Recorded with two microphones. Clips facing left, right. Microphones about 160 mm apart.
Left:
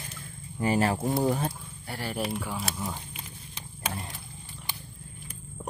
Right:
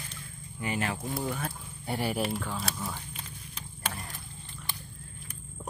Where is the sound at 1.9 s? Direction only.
20° right (ahead or behind).